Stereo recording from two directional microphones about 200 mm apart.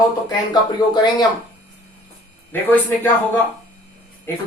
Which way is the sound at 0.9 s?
20° left (ahead or behind).